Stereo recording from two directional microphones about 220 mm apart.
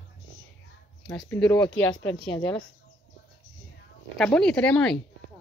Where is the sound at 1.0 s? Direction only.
5° left (ahead or behind).